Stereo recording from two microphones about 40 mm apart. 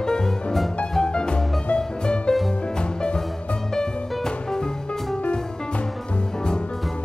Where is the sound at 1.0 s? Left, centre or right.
Left.